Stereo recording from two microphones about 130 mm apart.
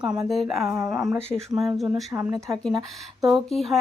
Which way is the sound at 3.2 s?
Centre (ahead or behind).